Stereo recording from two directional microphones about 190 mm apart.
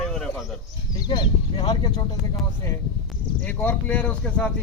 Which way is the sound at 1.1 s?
25° left (ahead or behind).